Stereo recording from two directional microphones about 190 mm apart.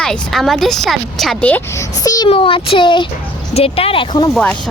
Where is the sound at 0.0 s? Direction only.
Centre (ahead or behind); by 4.3 s 25° left (ahead or behind).